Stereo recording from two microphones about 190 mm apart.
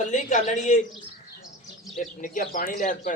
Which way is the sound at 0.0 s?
40° left (ahead or behind).